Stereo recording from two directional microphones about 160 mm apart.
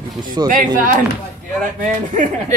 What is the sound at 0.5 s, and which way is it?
Speech, 60° right (ahead or behind).